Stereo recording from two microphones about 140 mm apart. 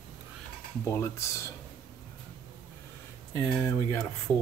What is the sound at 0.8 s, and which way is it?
Speech, 20° left (ahead or behind).